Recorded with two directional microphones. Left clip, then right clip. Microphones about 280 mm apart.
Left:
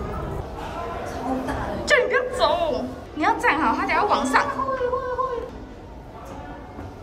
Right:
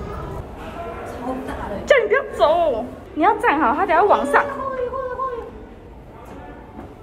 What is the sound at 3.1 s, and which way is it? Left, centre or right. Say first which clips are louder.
A woman's voice: right 4 dB; centre.